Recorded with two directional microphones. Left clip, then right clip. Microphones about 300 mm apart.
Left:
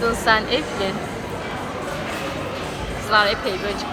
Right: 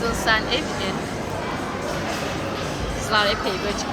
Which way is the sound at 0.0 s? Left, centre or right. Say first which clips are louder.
Left 3 dB; centre.